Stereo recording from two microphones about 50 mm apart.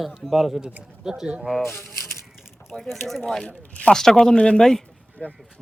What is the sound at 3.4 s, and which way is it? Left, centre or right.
Speech, left.